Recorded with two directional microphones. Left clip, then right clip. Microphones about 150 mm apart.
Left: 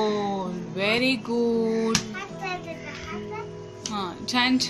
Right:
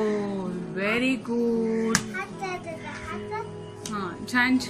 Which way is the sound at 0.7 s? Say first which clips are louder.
Left 2 dB; 20° left (ahead or behind).